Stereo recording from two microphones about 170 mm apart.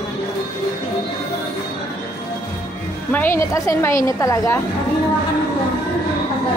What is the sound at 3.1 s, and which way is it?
A woman's voice, 15° left (ahead or behind).